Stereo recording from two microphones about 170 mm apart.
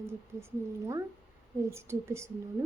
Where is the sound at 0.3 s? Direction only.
15° right (ahead or behind).